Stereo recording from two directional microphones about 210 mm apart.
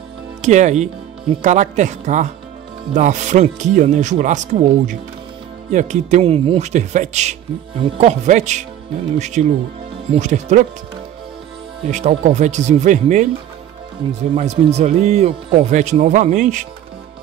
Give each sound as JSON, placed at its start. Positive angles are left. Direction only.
{"t": 0.4, "sound": "speech", "side_deg": -35}
{"t": 11.8, "sound": "speech", "side_deg": -35}
{"t": 14.3, "sound": "speech", "side_deg": -30}